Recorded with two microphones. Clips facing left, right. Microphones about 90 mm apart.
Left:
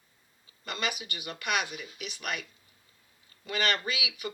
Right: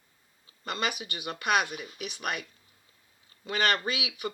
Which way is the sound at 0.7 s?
35° right (ahead or behind).